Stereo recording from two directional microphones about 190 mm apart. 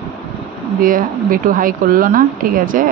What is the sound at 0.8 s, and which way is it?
Speech, 45° right (ahead or behind).